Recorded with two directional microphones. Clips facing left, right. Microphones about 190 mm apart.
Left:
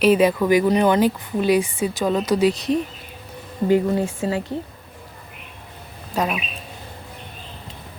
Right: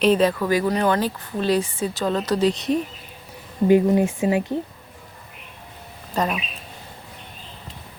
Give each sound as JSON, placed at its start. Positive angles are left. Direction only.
{"t": 0.0, "sound": "a woman's voice", "side_deg": 10}
{"t": 3.7, "sound": "speech", "side_deg": -15}
{"t": 6.1, "sound": "a woman's voice", "side_deg": 5}